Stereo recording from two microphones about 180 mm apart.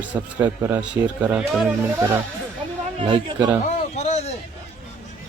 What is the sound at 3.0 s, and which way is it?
Speech, 30° right (ahead or behind).